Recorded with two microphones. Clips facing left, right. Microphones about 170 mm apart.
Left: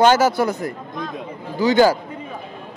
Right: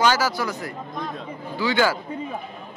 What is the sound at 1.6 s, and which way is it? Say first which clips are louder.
Speech: left 7 dB; 40° left (ahead or behind).